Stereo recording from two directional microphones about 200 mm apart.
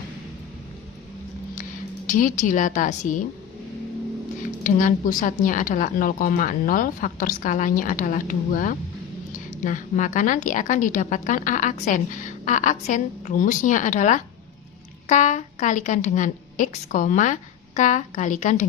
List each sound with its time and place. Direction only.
2.0 s a woman's voice: 40° left (ahead or behind)
4.6 s a woman's voice: 40° left (ahead or behind)